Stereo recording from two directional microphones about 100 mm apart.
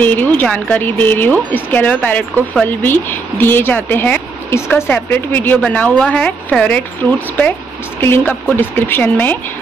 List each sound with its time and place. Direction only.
0.0 s speech: 15° left (ahead or behind)